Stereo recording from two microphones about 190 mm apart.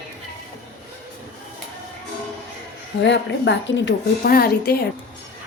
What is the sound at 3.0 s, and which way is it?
Speech, 70° left (ahead or behind).